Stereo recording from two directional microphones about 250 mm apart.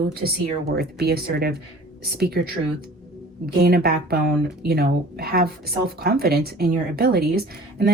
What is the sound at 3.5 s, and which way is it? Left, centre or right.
A woman's voice, right.